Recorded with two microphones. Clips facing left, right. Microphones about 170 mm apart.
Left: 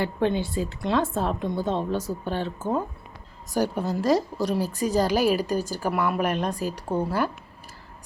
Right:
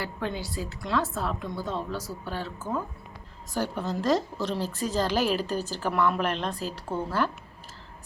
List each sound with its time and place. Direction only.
0.0 s a woman's voice: 25° left (ahead or behind)
3.5 s speech: 15° left (ahead or behind)